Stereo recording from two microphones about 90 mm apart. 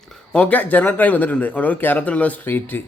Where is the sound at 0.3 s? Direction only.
15° left (ahead or behind).